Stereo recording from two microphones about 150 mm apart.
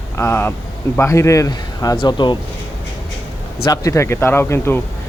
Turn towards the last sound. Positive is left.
turn(degrees=15)  # may be behind; listen again after turning